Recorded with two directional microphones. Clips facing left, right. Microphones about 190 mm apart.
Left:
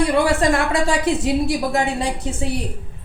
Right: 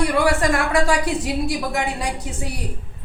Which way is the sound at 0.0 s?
25° left (ahead or behind).